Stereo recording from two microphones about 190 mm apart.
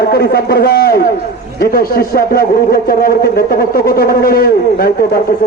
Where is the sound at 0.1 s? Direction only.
55° left (ahead or behind).